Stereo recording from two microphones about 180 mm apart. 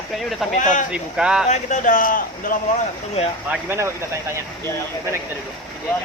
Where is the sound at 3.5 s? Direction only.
15° right (ahead or behind).